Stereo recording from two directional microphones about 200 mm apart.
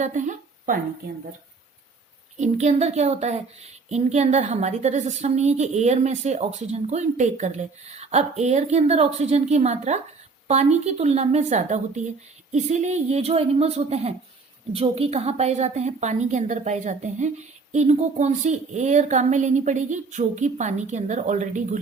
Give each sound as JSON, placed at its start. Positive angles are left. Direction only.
{"t": 0.0, "sound": "speech", "side_deg": -40}
{"t": 2.4, "sound": "a woman's voice", "side_deg": -35}